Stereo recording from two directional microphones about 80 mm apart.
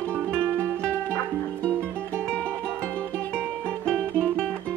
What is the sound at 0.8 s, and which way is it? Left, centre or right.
Music, centre.